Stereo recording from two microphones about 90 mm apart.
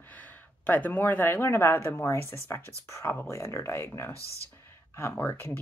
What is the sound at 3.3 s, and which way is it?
Speech, 30° left (ahead or behind).